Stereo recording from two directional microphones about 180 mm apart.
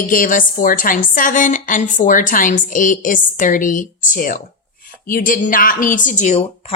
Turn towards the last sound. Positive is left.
turn(degrees=40)  # may be behind; listen again after turning